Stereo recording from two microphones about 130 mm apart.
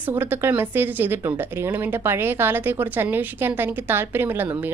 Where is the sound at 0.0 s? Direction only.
15° right (ahead or behind).